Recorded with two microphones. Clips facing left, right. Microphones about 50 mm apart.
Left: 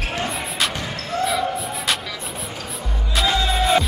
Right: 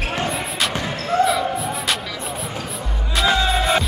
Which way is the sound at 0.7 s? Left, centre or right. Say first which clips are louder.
Right 5 dB; centre.